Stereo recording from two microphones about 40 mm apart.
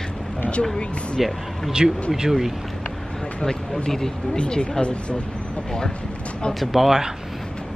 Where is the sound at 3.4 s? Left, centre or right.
Centre.